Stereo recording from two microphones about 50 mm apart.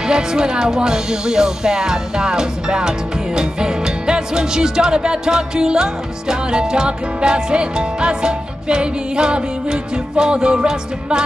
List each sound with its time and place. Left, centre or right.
0.1 s music: centre